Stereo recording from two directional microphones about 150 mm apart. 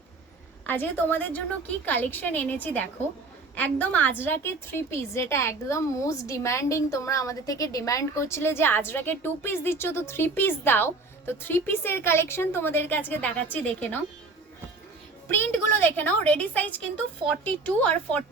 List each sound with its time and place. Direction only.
0.6 s a woman's voice: 15° left (ahead or behind)
15.3 s a woman's voice: 15° left (ahead or behind)